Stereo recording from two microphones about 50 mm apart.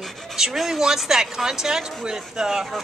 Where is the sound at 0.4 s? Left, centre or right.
Centre.